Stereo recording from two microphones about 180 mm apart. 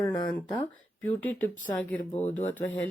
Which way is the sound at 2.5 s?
10° left (ahead or behind).